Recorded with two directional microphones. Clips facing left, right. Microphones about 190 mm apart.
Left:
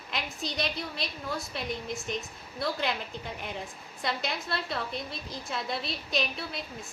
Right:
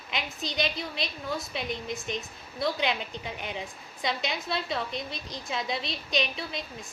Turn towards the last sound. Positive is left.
turn(degrees=0)  # may be behind; listen again after turning